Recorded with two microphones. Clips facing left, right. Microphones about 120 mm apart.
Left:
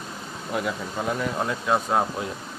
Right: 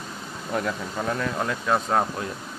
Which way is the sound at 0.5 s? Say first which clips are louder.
Even; 5° left (ahead or behind).